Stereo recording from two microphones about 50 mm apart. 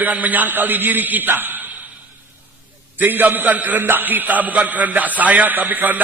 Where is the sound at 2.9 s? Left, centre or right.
Right.